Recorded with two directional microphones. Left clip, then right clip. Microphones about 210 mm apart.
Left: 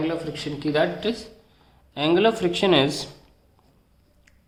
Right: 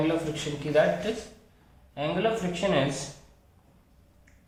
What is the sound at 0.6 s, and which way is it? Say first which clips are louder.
Speech: left 1 dB; 45° left (ahead or behind).